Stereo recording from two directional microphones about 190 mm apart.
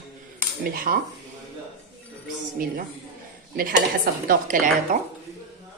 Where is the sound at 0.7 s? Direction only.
50° right (ahead or behind).